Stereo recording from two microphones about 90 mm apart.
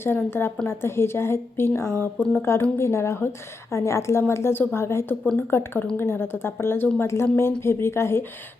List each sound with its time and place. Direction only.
0.0 s a woman's voice: 25° left (ahead or behind)